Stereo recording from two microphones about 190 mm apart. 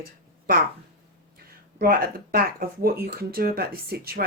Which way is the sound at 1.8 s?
50° right (ahead or behind).